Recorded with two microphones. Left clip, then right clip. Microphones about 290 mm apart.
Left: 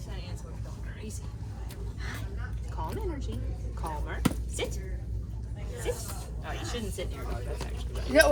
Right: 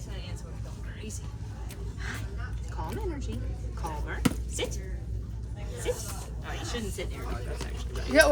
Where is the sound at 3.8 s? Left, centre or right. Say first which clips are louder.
Right 1 dB; centre.